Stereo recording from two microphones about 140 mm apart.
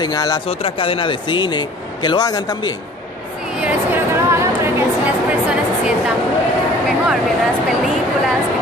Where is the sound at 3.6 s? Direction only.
10° right (ahead or behind).